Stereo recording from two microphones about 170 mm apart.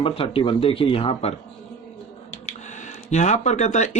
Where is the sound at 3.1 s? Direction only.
45° left (ahead or behind).